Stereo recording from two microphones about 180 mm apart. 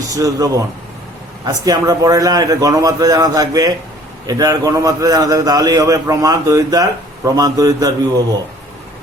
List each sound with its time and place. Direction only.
0.1 s a man's voice: 20° right (ahead or behind)